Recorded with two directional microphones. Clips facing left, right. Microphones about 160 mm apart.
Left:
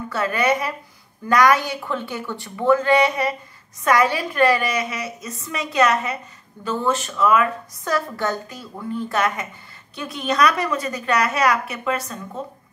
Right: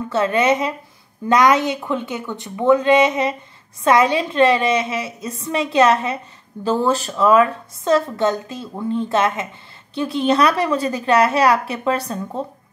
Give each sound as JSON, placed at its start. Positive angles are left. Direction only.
{"t": 0.1, "sound": "a woman's voice", "side_deg": -25}